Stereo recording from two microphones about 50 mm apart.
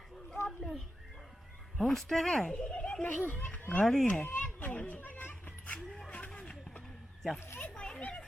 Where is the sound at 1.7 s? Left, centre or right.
Centre.